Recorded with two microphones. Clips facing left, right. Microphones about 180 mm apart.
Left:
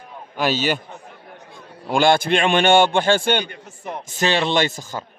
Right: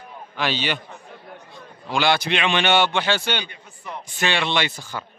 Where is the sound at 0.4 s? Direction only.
45° left (ahead or behind).